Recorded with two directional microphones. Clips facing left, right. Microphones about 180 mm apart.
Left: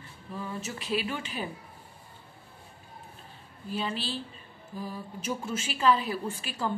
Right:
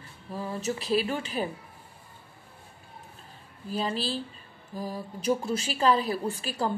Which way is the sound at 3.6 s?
40° right (ahead or behind).